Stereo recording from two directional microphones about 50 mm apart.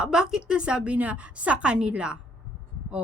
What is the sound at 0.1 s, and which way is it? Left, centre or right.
A woman's voice, centre.